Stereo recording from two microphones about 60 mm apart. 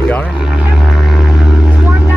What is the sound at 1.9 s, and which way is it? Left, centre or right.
Vehicle, right.